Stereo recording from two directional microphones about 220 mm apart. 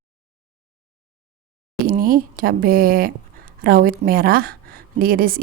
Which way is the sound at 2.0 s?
40° right (ahead or behind).